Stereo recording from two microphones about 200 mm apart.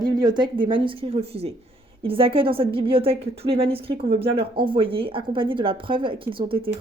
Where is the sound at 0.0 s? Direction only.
20° right (ahead or behind).